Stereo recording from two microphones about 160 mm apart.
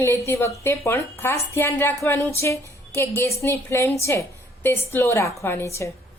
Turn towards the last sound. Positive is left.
turn(degrees=20)  # may be behind; listen again after turning